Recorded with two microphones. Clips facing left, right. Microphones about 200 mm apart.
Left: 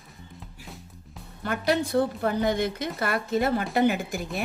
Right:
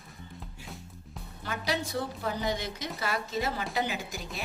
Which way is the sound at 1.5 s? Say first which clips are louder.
Left 7 dB; 55° left (ahead or behind).